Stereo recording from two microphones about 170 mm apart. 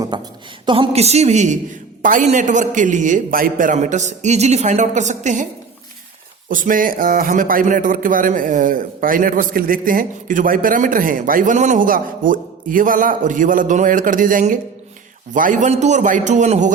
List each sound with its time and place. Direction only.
0.1 s a man's voice: 25° right (ahead or behind); by 5.5 s 45° right (ahead or behind)
6.5 s a man's voice: 55° right (ahead or behind)